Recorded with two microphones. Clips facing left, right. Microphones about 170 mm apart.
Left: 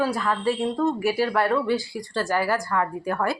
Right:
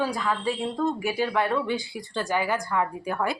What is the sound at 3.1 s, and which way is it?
Speech, 5° right (ahead or behind).